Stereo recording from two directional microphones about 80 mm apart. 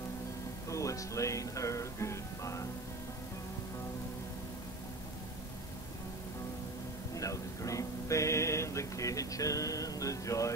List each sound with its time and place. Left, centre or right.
0.7 s speech: left
7.2 s speech: left